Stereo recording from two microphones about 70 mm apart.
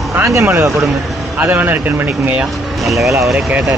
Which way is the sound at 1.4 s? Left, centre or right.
Right.